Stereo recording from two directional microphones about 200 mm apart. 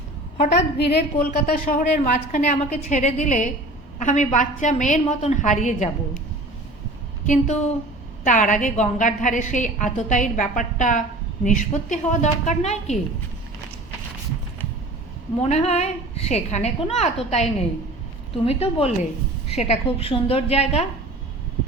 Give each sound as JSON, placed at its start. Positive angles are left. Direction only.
{"t": 0.5, "sound": "a woman's voice", "side_deg": 55}
{"t": 7.3, "sound": "a woman's voice", "side_deg": 35}
{"t": 15.4, "sound": "a woman's voice", "side_deg": 30}